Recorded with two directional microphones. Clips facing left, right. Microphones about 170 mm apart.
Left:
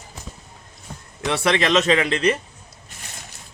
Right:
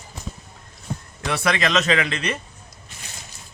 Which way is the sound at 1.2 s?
25° left (ahead or behind).